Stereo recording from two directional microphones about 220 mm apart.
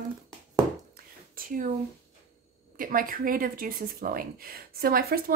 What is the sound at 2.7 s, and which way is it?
Speech, 40° right (ahead or behind).